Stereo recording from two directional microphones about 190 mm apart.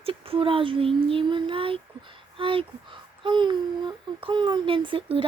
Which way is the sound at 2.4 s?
25° right (ahead or behind).